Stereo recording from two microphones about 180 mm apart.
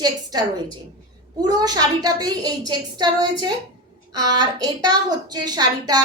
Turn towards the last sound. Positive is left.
turn(degrees=-20)  # may be behind; listen again after turning